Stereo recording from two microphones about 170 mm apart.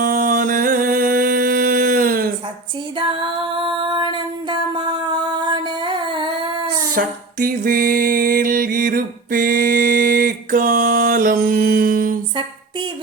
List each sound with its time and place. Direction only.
0.0 s a sound: 50° right (ahead or behind)
3.0 s music: 30° right (ahead or behind)
6.9 s music: 55° right (ahead or behind)